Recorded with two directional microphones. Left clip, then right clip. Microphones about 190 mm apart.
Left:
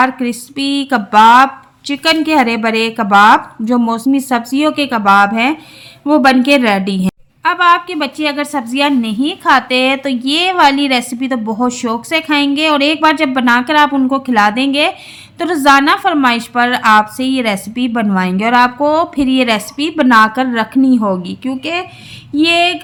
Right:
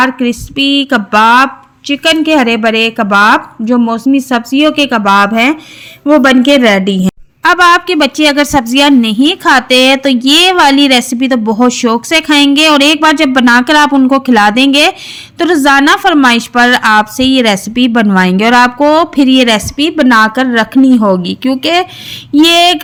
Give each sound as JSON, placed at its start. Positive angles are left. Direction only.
{"t": 0.0, "sound": "a woman's voice", "side_deg": -15}
{"t": 7.4, "sound": "a woman's voice", "side_deg": -35}